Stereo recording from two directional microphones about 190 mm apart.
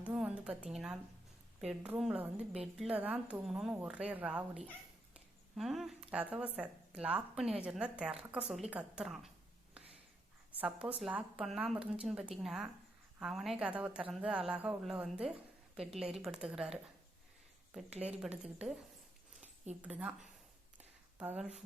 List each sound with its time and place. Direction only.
0.0 s a woman's voice: 5° right (ahead or behind)
5.1 s a sound: centre (ahead or behind)
6.3 s a woman's voice: 5° right (ahead or behind)
10.6 s a woman's voice: 5° right (ahead or behind)
17.9 s speech: 35° right (ahead or behind)
18.2 s a woman's voice: 5° right (ahead or behind)
20.0 s a woman's voice: 5° right (ahead or behind)
20.7 s a sound: 5° right (ahead or behind)